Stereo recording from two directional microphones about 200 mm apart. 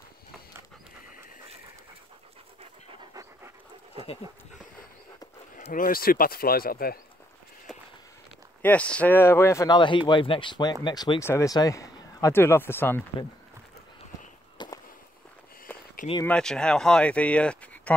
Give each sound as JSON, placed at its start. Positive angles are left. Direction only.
{"t": 2.6, "sound": "pant", "side_deg": -25}
{"t": 5.6, "sound": "speech", "side_deg": 45}
{"t": 7.7, "sound": "walk", "side_deg": 0}
{"t": 8.6, "sound": "speech", "side_deg": 5}
{"t": 14.6, "sound": "walk", "side_deg": 20}
{"t": 15.7, "sound": "a sound", "side_deg": 10}
{"t": 16.3, "sound": "speech", "side_deg": 5}